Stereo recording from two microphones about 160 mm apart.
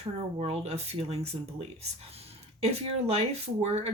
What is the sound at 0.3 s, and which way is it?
Speech, 40° right (ahead or behind).